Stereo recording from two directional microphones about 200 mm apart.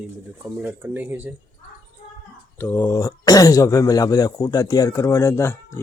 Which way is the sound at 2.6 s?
10° left (ahead or behind).